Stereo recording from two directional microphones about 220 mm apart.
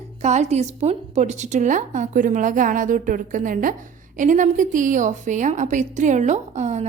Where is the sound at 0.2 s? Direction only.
30° right (ahead or behind).